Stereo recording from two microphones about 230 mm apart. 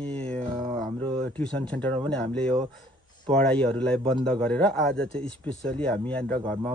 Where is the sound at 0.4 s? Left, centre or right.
Right.